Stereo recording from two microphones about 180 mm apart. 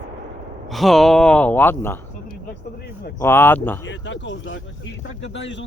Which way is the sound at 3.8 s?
90° left.